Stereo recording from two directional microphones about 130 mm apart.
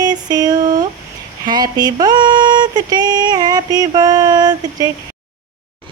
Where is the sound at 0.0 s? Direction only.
30° right (ahead or behind).